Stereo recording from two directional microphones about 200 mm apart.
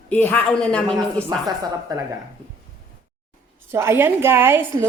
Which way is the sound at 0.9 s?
20° right (ahead or behind).